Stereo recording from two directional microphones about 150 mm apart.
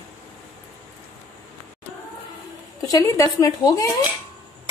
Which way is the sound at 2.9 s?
20° left (ahead or behind).